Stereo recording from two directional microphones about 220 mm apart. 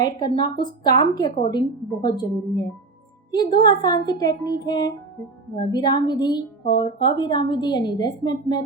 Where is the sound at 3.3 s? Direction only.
20° left (ahead or behind).